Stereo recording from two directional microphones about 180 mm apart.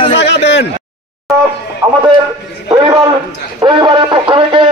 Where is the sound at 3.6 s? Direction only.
20° right (ahead or behind).